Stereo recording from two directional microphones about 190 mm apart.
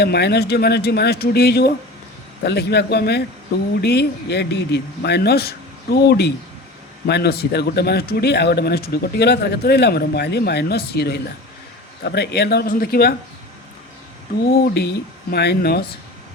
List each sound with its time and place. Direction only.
0.0 s speech: 60° left (ahead or behind)
14.7 s speech: 60° left (ahead or behind)